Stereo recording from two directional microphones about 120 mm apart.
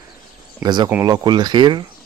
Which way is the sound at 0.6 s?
35° right (ahead or behind).